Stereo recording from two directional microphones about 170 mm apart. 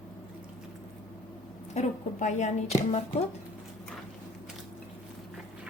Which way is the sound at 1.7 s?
45° left (ahead or behind).